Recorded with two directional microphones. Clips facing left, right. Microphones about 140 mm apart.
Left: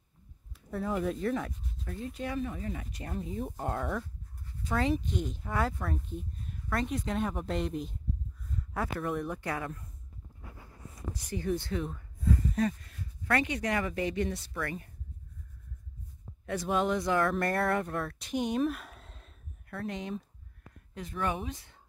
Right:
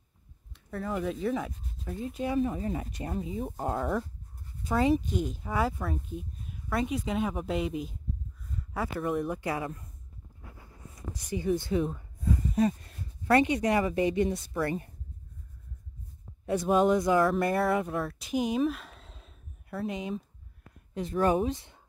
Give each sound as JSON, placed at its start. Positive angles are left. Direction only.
{"t": 0.5, "sound": "speech", "side_deg": 0}
{"t": 2.3, "sound": "speech", "side_deg": -30}
{"t": 3.1, "sound": "speech", "side_deg": -5}
{"t": 4.6, "sound": "speech", "side_deg": -10}
{"t": 11.2, "sound": "speech", "side_deg": -15}
{"t": 12.0, "sound": "a sound", "side_deg": -15}
{"t": 12.7, "sound": "speech", "side_deg": -30}
{"t": 14.5, "sound": "speech", "side_deg": -30}
{"t": 16.7, "sound": "speech", "side_deg": -15}
{"t": 20.9, "sound": "speech", "side_deg": -30}